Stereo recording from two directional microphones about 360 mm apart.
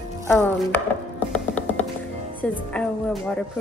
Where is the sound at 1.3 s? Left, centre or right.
Centre.